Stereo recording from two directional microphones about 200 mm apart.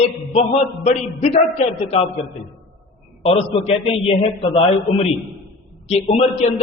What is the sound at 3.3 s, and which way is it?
A man's voice, 30° left (ahead or behind).